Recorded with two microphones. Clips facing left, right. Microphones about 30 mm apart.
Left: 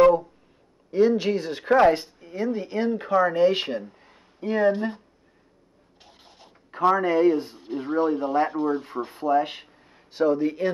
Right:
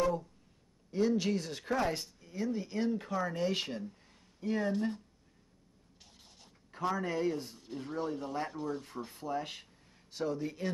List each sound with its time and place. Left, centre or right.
0.9 s speech: left
6.0 s a sound: left
7.0 s speech: left